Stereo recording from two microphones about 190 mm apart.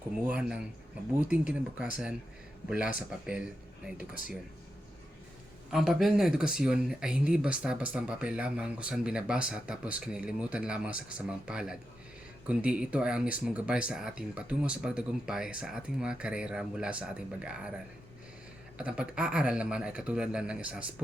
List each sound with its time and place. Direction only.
0.3 s speech: 5° right (ahead or behind)
5.7 s speech: centre (ahead or behind)
18.8 s speech: 5° right (ahead or behind)